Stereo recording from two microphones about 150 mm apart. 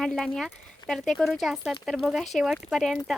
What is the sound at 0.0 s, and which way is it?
A woman's voice, centre (ahead or behind).